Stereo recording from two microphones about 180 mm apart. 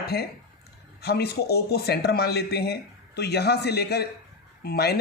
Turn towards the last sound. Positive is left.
turn(degrees=65)  # may be behind; listen again after turning